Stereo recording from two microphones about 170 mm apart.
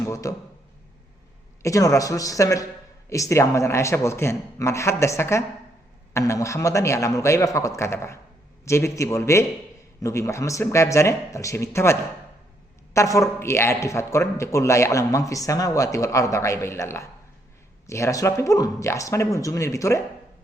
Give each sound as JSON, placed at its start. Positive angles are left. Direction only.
{"t": 0.0, "sound": "speech", "side_deg": 20}
{"t": 1.6, "sound": "a man's voice", "side_deg": 20}